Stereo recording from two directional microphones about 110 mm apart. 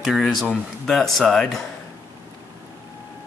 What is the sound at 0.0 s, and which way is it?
Speech, centre (ahead or behind).